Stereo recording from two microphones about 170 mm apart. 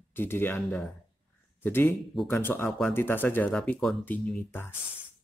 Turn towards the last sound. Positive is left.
turn(degrees=10)  # may be behind; listen again after turning